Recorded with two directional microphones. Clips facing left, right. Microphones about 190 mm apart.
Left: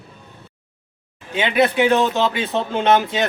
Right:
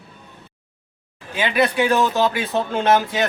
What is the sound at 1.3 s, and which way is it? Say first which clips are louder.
Speech: left 2 dB; 20° left (ahead or behind).